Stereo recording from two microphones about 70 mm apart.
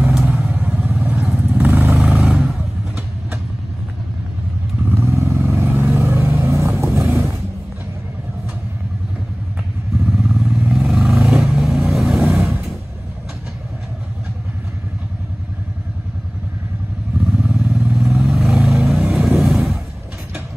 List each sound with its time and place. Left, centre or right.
0.1 s vehicle: centre
2.1 s vehicle: centre
4.8 s vehicle: right
6.4 s vehicle: right
6.7 s vehicle: right
10.0 s vehicle: centre
17.2 s vehicle: centre
17.9 s vehicle: centre